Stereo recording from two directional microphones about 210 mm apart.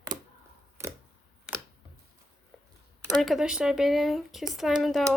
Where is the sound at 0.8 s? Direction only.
10° right (ahead or behind).